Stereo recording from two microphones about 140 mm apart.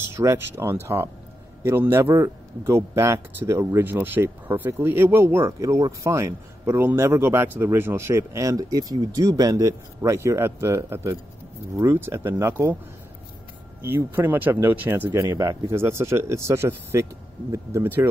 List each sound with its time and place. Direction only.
0.0 s a man's voice: 20° right (ahead or behind)
13.8 s speech: 15° right (ahead or behind)